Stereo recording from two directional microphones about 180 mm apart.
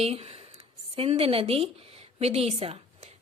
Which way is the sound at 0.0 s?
35° right (ahead or behind).